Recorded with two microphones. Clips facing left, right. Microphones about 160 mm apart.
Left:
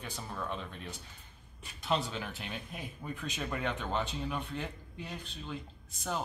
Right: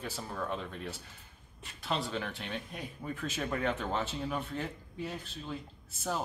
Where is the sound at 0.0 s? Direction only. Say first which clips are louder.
Right 2 dB; 5° right (ahead or behind).